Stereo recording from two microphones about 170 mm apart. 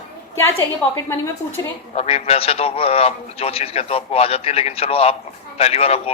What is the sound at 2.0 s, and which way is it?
A man's voice, 35° left (ahead or behind).